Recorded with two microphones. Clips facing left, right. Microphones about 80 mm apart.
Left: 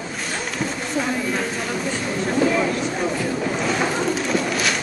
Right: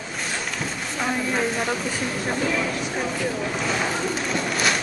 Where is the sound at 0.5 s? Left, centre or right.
Centre.